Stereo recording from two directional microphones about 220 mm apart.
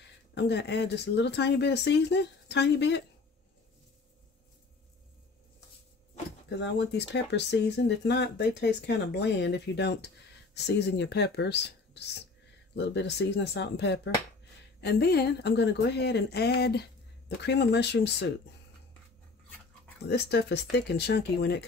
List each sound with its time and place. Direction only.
0.3 s speech: 50° left (ahead or behind)
6.6 s speech: 50° left (ahead or behind)
20.1 s speech: 50° left (ahead or behind)